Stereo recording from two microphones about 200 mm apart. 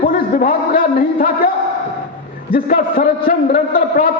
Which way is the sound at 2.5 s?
45° left (ahead or behind).